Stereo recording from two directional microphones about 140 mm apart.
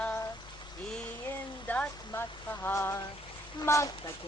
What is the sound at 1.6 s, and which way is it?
Music, 10° left (ahead or behind).